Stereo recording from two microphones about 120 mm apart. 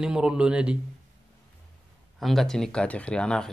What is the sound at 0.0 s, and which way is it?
Speech, 5° right (ahead or behind).